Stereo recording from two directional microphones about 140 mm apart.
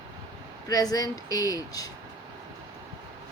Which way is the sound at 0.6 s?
25° left (ahead or behind).